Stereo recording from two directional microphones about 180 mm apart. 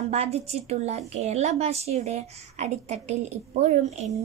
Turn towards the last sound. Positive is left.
turn(degrees=-40)  # may be behind; listen again after turning